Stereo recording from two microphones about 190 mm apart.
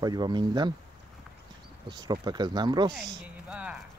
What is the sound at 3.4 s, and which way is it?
Rattle, 10° right (ahead or behind).